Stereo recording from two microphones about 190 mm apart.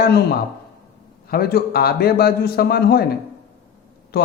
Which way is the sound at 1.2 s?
50° left (ahead or behind).